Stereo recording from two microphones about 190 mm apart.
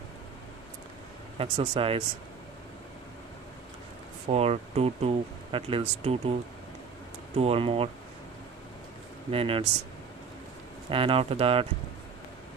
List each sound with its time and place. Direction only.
1.4 s speech: 30° right (ahead or behind)
4.3 s speech: 35° right (ahead or behind)
7.3 s speech: 30° right (ahead or behind)
9.3 s speech: 30° right (ahead or behind)
10.9 s speech: 30° right (ahead or behind)